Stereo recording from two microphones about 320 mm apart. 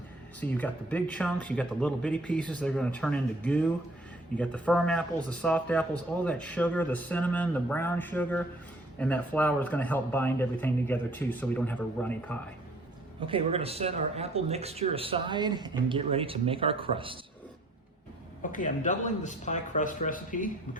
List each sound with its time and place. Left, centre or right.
0.3 s speech: centre
13.2 s speech: centre
18.5 s a man's voice: left